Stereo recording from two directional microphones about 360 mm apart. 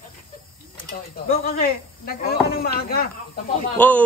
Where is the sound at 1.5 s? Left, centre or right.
Left.